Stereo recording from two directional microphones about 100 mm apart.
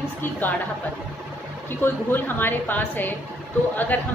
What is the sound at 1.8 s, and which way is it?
A woman's voice, 20° left (ahead or behind).